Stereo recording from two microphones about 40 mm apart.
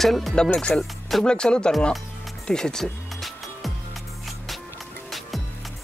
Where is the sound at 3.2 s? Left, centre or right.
Centre.